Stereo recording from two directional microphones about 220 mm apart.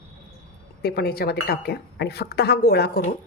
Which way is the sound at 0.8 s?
45° left (ahead or behind).